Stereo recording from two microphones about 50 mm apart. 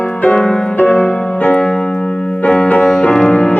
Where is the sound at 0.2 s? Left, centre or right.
Left.